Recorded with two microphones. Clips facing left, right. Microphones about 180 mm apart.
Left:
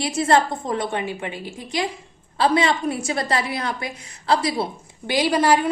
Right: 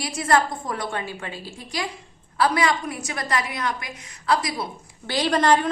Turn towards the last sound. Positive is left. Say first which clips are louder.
# left 1 dB
turn(degrees=10)  # may be behind; listen again after turning